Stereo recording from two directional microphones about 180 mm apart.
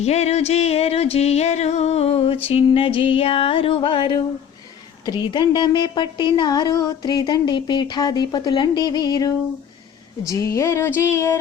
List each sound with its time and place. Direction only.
0.0 s music: 35° left (ahead or behind)
5.0 s a woman's voice: 25° left (ahead or behind)
10.2 s a sound: 15° left (ahead or behind)